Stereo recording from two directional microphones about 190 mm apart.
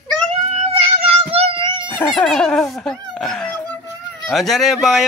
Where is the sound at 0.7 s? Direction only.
30° right (ahead or behind).